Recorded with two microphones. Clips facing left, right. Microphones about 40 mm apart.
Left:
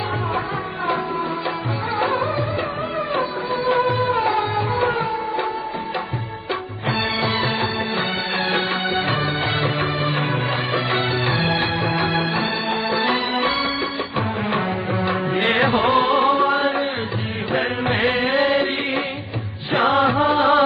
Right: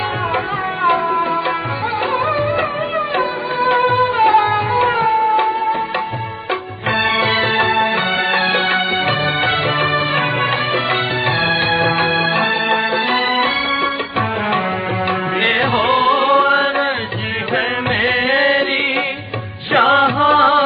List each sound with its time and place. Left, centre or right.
2.0 s music: right
6.9 s music: right
15.0 s music: right